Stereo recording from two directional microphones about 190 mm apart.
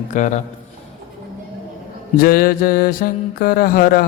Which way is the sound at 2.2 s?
50° left (ahead or behind).